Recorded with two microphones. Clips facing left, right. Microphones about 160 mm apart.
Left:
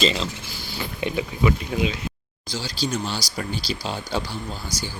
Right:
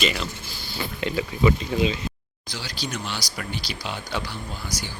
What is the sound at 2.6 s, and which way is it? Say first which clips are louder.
Speech: left 5 dB; 30° left (ahead or behind).